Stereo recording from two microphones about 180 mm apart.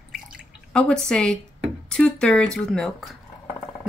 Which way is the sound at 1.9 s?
5° left (ahead or behind).